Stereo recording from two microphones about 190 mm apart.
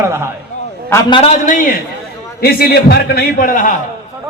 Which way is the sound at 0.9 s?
25° left (ahead or behind).